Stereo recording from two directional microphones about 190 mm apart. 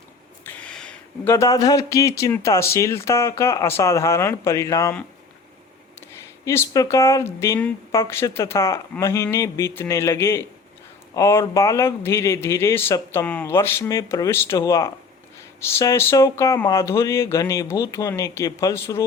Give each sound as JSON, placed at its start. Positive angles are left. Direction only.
{"t": 0.4, "sound": "speech", "side_deg": 5}
{"t": 6.4, "sound": "speech", "side_deg": 15}